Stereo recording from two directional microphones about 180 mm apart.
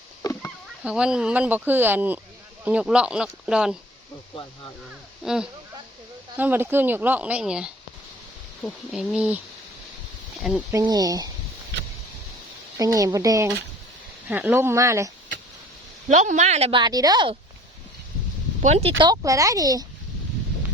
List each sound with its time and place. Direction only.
0.2 s a sound: 20° left (ahead or behind)
0.9 s speech: 5° right (ahead or behind)
5.2 s speech: 5° right (ahead or behind)
10.7 s speech: 20° right (ahead or behind)
12.7 s speech: 20° right (ahead or behind)
16.0 s a woman's voice: 40° right (ahead or behind); by 17.3 s 25° right (ahead or behind)
18.6 s a woman's voice: 40° right (ahead or behind)
18.9 s speech: 20° right (ahead or behind)